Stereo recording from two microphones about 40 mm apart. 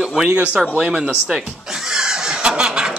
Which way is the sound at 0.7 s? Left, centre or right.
Right.